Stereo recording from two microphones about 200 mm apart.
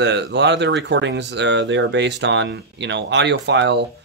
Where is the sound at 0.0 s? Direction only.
60° right (ahead or behind).